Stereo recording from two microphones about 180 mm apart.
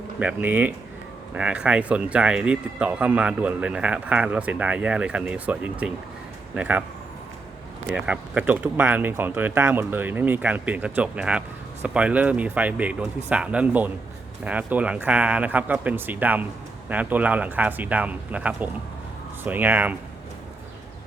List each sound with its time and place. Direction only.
0.2 s speech: 5° right (ahead or behind)
7.9 s speech: 10° right (ahead or behind)